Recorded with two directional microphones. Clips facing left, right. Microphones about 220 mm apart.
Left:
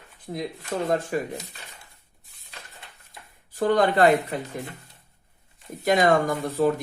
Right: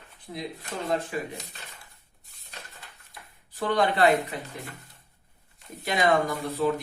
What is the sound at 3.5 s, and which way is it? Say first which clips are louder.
Speech: left 5 dB; 45° left (ahead or behind).